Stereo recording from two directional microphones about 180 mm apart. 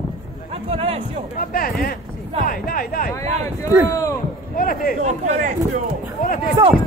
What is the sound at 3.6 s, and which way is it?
Speech, 15° left (ahead or behind).